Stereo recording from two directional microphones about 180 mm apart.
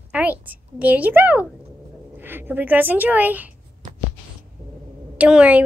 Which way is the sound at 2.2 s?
10° right (ahead or behind).